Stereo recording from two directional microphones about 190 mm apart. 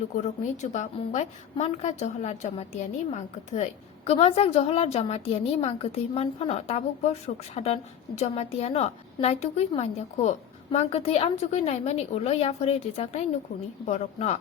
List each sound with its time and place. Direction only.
0.6 s a woman's voice: 40° left (ahead or behind)